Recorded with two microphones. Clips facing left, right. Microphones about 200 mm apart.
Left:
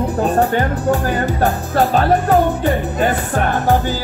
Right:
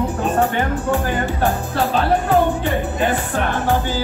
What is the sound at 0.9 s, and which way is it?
Speech, 40° left (ahead or behind).